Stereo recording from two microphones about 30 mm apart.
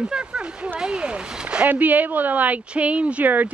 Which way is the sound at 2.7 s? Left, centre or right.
Right.